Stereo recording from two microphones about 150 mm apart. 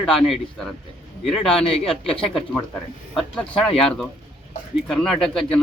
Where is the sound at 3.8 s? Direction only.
5° left (ahead or behind).